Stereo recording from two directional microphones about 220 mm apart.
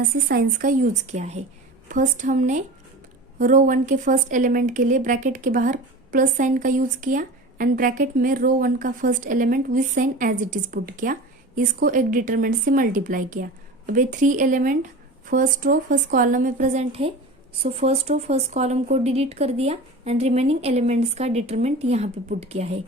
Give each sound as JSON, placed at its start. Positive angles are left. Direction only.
{"t": 0.1, "sound": "a woman's voice", "side_deg": -45}